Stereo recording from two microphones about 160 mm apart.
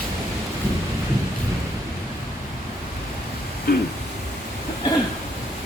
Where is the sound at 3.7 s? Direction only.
75° left (ahead or behind).